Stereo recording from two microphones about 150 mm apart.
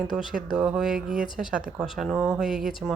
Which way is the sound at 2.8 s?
10° left (ahead or behind).